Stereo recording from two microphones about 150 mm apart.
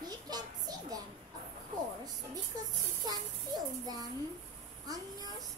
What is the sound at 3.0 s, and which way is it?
Speech, 25° right (ahead or behind).